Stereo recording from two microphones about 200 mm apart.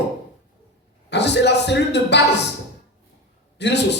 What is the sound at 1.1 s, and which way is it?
A man's voice, 60° left (ahead or behind).